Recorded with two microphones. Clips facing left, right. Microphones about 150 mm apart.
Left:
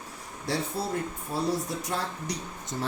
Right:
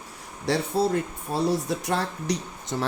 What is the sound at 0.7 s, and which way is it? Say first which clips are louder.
Speech: right 7 dB; 75° right (ahead or behind).